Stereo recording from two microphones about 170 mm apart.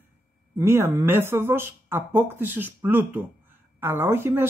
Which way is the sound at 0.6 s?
15° right (ahead or behind).